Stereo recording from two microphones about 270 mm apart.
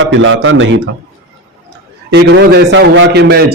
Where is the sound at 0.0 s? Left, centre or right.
Right.